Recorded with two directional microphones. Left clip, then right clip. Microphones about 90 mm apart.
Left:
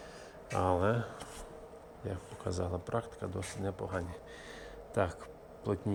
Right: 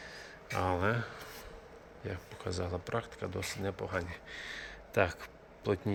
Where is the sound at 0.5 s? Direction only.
30° left (ahead or behind).